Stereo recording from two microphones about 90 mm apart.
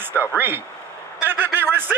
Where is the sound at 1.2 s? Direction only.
20° right (ahead or behind).